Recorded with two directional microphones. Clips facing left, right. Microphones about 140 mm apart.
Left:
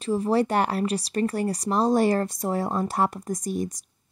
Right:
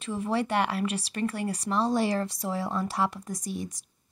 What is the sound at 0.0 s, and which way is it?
Speech, 35° left (ahead or behind).